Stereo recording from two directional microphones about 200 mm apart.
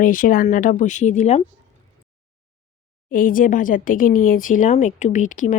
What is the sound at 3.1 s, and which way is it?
Speech, 45° left (ahead or behind).